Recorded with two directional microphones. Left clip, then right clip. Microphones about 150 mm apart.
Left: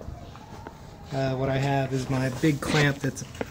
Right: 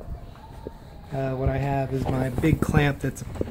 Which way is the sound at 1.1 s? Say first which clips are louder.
Left 1 dB; 5° right (ahead or behind).